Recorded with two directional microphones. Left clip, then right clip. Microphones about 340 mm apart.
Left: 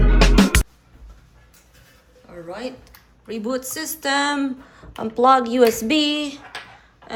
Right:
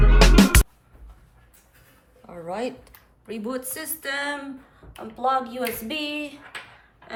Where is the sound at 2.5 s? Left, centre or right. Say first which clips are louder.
Right 2 dB; centre.